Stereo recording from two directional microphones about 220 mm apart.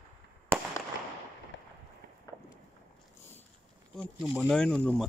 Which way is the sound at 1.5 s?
55° left (ahead or behind).